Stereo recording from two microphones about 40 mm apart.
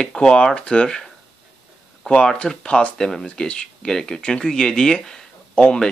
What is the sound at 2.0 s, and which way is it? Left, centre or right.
Speech, left.